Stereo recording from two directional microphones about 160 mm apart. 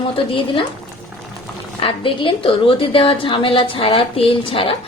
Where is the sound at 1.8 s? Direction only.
35° left (ahead or behind).